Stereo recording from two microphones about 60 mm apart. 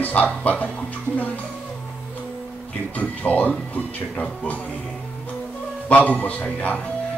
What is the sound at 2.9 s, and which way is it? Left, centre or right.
Speech, left.